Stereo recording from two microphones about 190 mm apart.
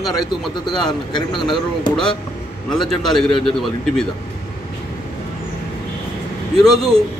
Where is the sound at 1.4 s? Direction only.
25° left (ahead or behind).